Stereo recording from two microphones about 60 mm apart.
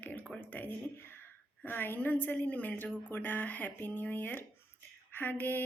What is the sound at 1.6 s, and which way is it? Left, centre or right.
A woman's voice, left.